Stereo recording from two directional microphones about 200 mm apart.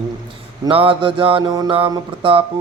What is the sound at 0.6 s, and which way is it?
Mantra, 25° right (ahead or behind).